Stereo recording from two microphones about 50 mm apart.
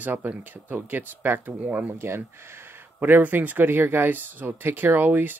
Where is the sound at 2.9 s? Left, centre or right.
Right.